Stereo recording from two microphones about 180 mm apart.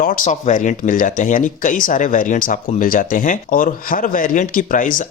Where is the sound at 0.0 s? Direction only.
50° left (ahead or behind).